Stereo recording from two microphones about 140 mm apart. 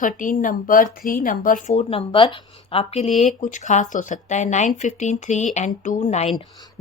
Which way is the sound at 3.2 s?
65° left (ahead or behind).